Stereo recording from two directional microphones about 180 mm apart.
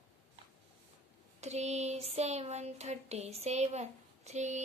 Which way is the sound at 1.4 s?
40° right (ahead or behind).